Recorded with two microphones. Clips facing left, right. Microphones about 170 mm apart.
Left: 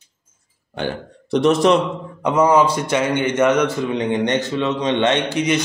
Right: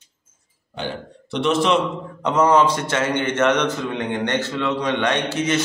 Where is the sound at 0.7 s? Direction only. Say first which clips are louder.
Left 4 dB; 45° left (ahead or behind).